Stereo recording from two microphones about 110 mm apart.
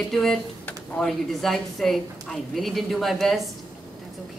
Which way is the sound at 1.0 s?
5° left (ahead or behind).